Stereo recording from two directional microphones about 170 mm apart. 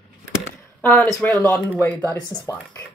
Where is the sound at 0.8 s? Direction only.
5° left (ahead or behind).